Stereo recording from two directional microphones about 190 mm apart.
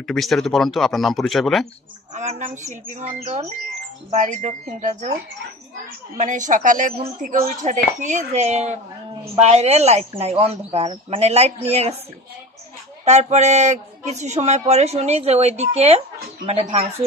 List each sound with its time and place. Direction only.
0.0 s speech: centre (ahead or behind)
2.1 s speech: 40° right (ahead or behind)
6.1 s speech: 40° right (ahead or behind)
13.0 s speech: 35° right (ahead or behind)